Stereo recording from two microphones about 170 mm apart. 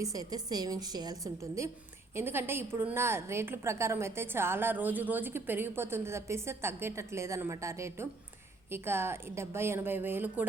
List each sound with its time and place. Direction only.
0.0 s a woman's voice: 20° right (ahead or behind)